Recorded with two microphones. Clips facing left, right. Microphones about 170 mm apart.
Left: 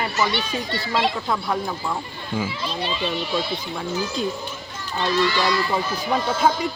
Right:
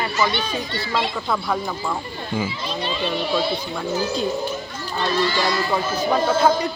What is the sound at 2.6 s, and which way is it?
Speech, 40° right (ahead or behind).